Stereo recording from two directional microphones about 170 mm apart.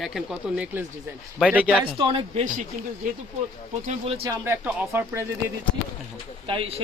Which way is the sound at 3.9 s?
35° right (ahead or behind).